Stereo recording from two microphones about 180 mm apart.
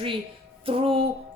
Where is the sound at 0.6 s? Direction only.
30° right (ahead or behind).